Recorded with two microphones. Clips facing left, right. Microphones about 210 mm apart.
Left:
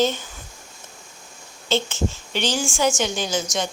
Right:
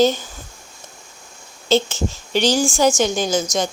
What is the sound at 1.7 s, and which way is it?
A woman's voice, 40° right (ahead or behind).